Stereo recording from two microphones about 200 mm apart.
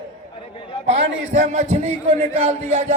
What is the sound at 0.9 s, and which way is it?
A man's voice, 35° right (ahead or behind).